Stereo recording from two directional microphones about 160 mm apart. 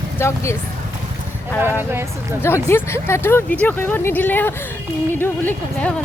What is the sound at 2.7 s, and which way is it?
Speech, 15° left (ahead or behind).